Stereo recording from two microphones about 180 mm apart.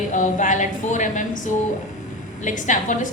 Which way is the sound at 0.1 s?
45° left (ahead or behind).